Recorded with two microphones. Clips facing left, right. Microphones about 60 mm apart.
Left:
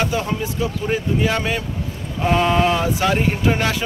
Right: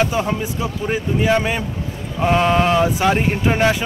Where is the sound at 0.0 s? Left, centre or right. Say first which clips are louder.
Right 2 dB; centre.